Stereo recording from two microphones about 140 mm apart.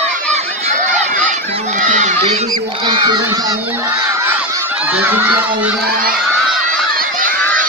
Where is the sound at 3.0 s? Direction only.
25° right (ahead or behind).